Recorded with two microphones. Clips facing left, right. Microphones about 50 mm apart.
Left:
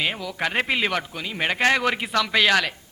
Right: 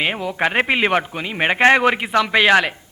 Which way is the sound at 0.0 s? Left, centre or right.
Right.